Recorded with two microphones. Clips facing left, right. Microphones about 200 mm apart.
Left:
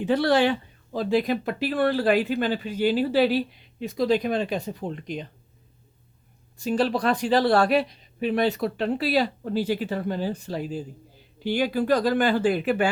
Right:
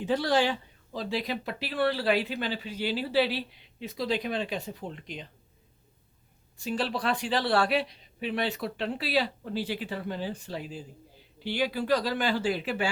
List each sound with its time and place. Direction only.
0.0 s speech: 65° left (ahead or behind); by 5.2 s 45° left (ahead or behind)
6.6 s speech: 45° left (ahead or behind)